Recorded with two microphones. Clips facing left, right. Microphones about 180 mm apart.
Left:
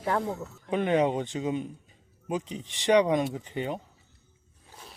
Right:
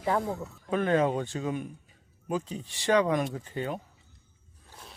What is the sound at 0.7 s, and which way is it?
Speech, 20° left (ahead or behind).